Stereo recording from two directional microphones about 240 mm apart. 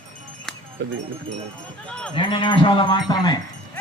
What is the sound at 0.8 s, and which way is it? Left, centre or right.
Speech, right.